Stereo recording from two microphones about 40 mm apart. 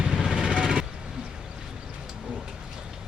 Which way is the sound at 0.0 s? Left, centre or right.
Right.